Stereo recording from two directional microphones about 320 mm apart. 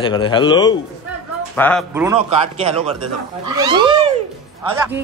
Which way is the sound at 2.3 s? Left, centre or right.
Centre.